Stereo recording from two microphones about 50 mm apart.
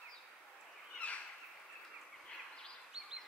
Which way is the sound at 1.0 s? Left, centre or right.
Left.